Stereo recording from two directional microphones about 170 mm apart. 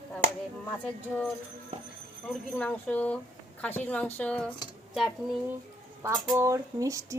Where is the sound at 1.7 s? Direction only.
40° right (ahead or behind).